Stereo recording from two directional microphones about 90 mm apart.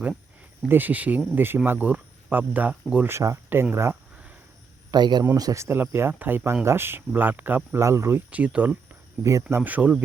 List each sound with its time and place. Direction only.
0.7 s speech: 20° right (ahead or behind)
3.1 s speech: 30° right (ahead or behind)
4.9 s a man's voice: 50° right (ahead or behind)
5.4 s speech: 40° right (ahead or behind)
5.6 s speech: 25° right (ahead or behind)
8.3 s speech: 15° right (ahead or behind)